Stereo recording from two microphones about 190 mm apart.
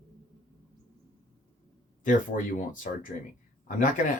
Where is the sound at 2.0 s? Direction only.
45° left (ahead or behind).